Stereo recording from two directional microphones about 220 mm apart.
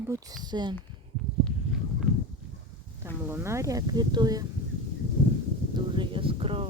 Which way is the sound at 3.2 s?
10° right (ahead or behind).